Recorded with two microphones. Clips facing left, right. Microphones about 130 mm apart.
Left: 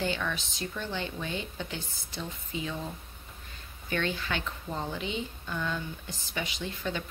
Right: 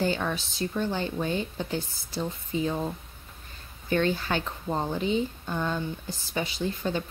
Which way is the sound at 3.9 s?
40° right (ahead or behind).